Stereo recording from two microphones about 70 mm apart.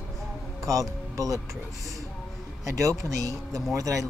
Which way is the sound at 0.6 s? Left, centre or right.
Right.